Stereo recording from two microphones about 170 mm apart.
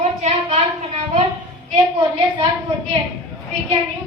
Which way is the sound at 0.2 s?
40° right (ahead or behind).